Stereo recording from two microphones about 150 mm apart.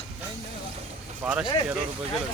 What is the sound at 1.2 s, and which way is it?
Speech, 10° right (ahead or behind).